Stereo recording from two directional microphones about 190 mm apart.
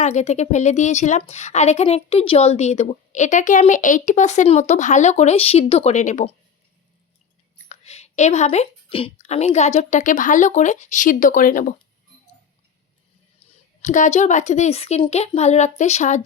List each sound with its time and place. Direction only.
0.0 s a woman's voice: 35° left (ahead or behind)
7.7 s a woman's voice: 35° left (ahead or behind)
13.8 s a woman's voice: 40° left (ahead or behind)